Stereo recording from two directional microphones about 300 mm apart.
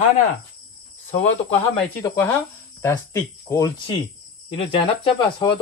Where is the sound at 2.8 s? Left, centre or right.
Centre.